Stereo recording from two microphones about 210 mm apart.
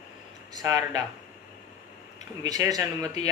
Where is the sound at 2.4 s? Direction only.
15° right (ahead or behind).